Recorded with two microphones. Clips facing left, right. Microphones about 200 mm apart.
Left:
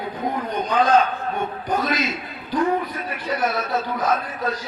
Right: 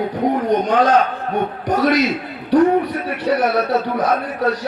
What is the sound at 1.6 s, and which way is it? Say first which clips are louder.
A man's voice: right 8 dB; 75° right (ahead or behind).